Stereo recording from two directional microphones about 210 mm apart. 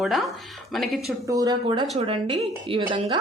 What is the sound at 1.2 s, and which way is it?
A woman's voice, 15° right (ahead or behind).